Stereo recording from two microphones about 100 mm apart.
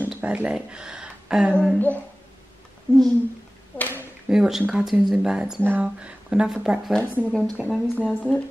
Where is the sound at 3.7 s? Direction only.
20° left (ahead or behind).